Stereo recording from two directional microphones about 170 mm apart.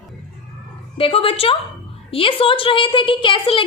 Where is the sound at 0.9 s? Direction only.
35° left (ahead or behind).